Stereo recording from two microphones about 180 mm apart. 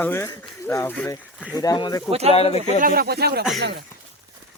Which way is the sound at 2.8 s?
55° right (ahead or behind).